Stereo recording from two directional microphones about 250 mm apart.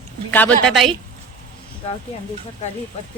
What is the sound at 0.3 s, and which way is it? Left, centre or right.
Speech, centre.